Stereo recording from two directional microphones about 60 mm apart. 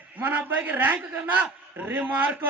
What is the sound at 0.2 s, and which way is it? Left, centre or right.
A man's voice, right.